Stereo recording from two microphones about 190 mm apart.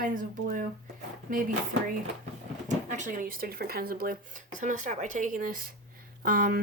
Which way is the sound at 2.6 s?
40° right (ahead or behind).